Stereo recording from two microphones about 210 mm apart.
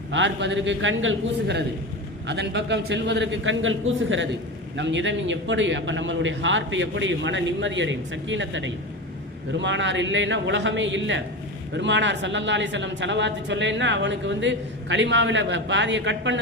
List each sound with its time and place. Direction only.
0.1 s a woman's voice: 60° right (ahead or behind)